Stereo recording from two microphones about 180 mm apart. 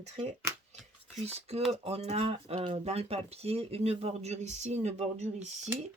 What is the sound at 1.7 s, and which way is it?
Speech, 35° right (ahead or behind).